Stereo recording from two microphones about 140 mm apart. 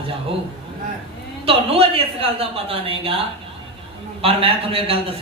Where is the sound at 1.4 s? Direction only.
45° right (ahead or behind).